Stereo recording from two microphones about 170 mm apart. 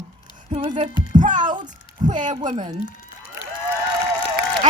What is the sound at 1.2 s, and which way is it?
Speech, 50° right (ahead or behind).